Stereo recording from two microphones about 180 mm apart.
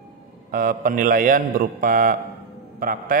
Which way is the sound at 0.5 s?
50° right (ahead or behind).